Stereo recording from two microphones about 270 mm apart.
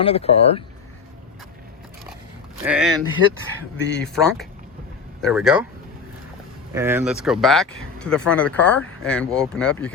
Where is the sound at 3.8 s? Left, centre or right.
Left.